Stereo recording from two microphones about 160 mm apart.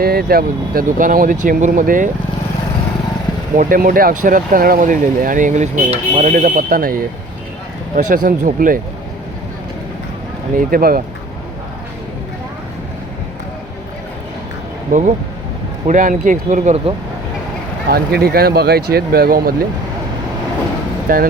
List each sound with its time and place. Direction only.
0.0 s speech: 70° right (ahead or behind)
3.6 s speech: 60° right (ahead or behind)
10.6 s speech: 65° right (ahead or behind)
14.9 s speech: 60° right (ahead or behind); by 16.9 s 45° right (ahead or behind)
17.8 s speech: 75° right (ahead or behind)
21.1 s speech: 60° right (ahead or behind)